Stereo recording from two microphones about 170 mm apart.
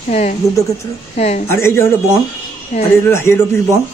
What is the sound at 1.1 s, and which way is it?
Speech, 40° left (ahead or behind).